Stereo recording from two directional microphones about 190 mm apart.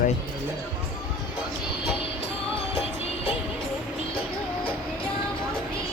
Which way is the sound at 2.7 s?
30° left (ahead or behind).